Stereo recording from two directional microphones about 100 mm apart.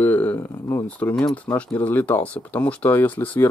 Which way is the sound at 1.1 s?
10° left (ahead or behind).